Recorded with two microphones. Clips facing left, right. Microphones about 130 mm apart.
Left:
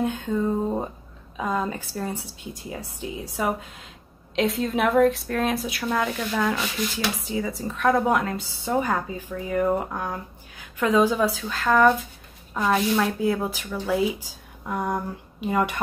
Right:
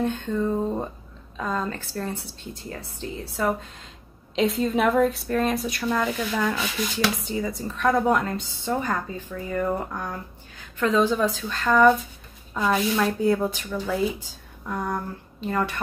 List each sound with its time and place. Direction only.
0.0 s a woman's voice: 10° left (ahead or behind)